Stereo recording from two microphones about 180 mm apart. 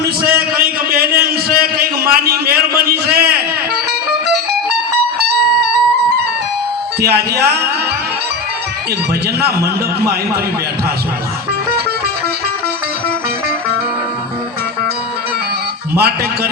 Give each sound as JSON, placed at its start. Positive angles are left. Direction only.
{"t": 0.2, "sound": "a sound", "side_deg": -55}
{"t": 7.0, "sound": "speech", "side_deg": -60}
{"t": 16.0, "sound": "speech", "side_deg": -60}